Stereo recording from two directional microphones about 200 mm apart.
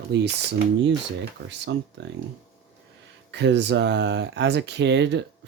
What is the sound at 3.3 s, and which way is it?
Speech, 60° right (ahead or behind).